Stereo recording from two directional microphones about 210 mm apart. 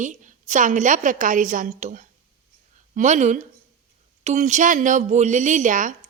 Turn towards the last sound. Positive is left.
turn(degrees=-40)  # may be behind; listen again after turning